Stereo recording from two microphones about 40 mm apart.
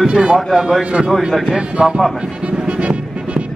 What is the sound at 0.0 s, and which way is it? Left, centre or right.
Speech, centre.